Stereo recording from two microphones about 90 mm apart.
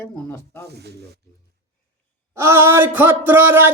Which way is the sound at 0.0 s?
30° left (ahead or behind).